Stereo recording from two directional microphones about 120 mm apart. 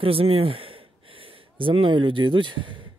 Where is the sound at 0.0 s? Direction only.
50° right (ahead or behind).